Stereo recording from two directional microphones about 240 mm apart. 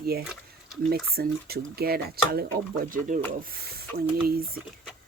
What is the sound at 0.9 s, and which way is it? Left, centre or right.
Speech, right.